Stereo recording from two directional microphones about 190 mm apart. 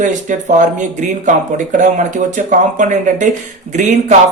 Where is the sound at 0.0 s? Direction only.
40° right (ahead or behind).